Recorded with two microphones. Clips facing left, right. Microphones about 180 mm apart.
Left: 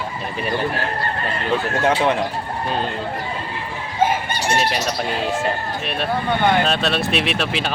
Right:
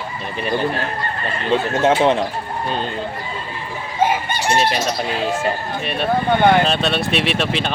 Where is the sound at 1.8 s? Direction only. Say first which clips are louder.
Right 3 dB; 20° right (ahead or behind).